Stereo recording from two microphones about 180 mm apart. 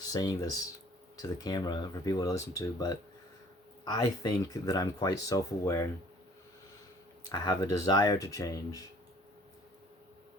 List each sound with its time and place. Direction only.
0.1 s speech: 20° left (ahead or behind)
7.3 s speech: 20° left (ahead or behind)